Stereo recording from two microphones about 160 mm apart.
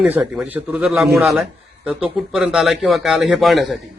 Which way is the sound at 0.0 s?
10° right (ahead or behind).